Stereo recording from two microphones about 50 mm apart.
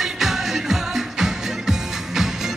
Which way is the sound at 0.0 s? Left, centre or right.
Centre.